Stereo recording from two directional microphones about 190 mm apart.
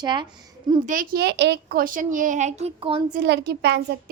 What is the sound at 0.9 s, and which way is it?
A child's voice, 50° right (ahead or behind).